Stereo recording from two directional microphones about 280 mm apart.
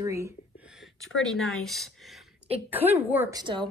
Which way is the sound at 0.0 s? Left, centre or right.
Centre.